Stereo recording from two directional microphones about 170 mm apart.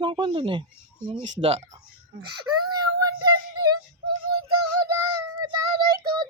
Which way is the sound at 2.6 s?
25° right (ahead or behind).